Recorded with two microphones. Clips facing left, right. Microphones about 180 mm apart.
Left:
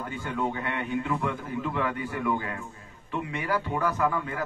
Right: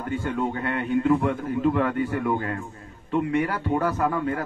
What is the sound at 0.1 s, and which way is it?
A man's voice, 50° right (ahead or behind).